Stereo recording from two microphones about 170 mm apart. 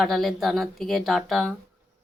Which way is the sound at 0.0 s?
Centre (ahead or behind).